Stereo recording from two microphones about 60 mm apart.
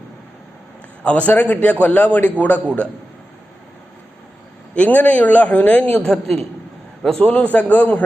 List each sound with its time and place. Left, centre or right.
1.0 s a man's voice: left
4.9 s a man's voice: left
6.1 s a man's voice: centre
7.2 s a man's voice: left